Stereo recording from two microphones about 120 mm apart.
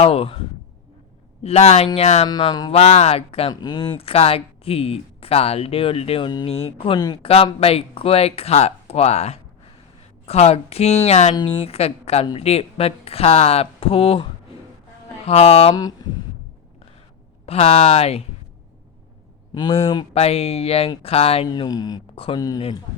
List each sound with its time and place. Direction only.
0.0 s speech: 55° left (ahead or behind)
1.5 s speech: 70° left (ahead or behind)
2.5 s speech: 40° left (ahead or behind)
2.7 s speech: 65° left (ahead or behind)
3.5 s speech: 35° left (ahead or behind)
3.9 s speech: 55° left (ahead or behind)
15.3 s speech: 60° left (ahead or behind)
17.4 s speech: 55° left (ahead or behind)
19.7 s speech: 25° left (ahead or behind)
20.1 s speech: 60° left (ahead or behind)
21.5 s speech: 35° left (ahead or behind)
22.1 s speech: 50° left (ahead or behind)
22.4 s speech: 30° left (ahead or behind)